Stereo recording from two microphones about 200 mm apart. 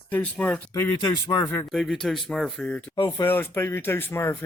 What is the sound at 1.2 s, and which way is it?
Speech, 15° left (ahead or behind).